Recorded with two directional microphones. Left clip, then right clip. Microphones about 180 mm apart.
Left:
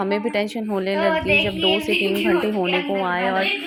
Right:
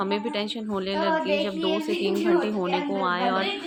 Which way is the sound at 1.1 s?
Centre (ahead or behind).